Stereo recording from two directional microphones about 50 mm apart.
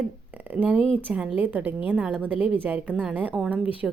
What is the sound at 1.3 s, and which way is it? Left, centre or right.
A woman's voice, right.